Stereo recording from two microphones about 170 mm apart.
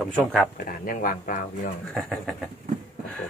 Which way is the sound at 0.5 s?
55° left (ahead or behind).